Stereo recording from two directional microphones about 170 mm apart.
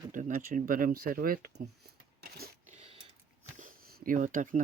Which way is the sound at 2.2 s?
65° right (ahead or behind).